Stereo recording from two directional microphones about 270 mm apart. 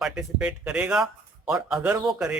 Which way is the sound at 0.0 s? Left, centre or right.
Centre.